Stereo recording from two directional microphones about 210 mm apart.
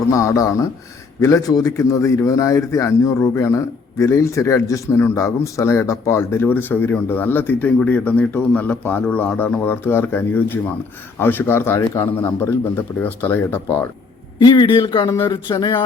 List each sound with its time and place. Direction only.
0.1 s a man's voice: 15° left (ahead or behind)
14.3 s speech: 20° left (ahead or behind)